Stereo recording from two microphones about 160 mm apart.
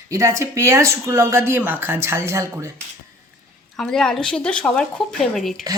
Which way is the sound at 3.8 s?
5° left (ahead or behind).